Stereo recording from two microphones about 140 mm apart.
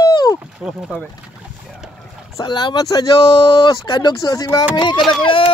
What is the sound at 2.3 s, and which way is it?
Speech, 30° left (ahead or behind).